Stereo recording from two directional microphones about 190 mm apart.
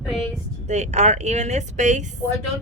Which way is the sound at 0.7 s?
35° right (ahead or behind).